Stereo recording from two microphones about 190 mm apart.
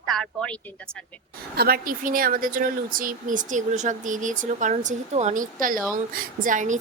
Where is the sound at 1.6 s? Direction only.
50° right (ahead or behind).